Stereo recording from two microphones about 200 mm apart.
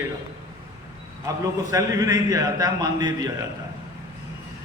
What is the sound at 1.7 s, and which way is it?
A man's voice, 15° right (ahead or behind).